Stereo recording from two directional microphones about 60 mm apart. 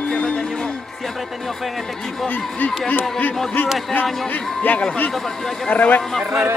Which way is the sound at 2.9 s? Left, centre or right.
Left.